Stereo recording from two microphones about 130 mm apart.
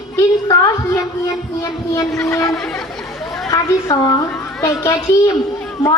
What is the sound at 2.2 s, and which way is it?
A woman's voice, 25° left (ahead or behind).